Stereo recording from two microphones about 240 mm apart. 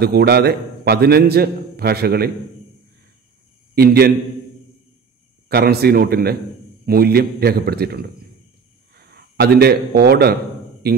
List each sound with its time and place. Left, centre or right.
0.0 s a man's voice: right
3.7 s a man's voice: right
5.5 s a man's voice: right